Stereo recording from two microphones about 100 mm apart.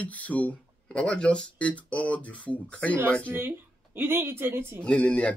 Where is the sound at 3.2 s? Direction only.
20° right (ahead or behind).